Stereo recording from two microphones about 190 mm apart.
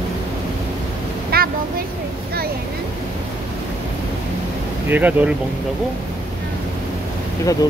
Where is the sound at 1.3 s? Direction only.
55° right (ahead or behind).